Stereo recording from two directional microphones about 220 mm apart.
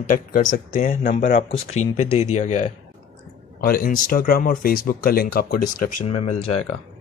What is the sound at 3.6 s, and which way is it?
Speech, 40° left (ahead or behind).